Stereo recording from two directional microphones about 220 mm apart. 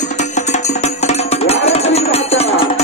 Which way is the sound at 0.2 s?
30° left (ahead or behind).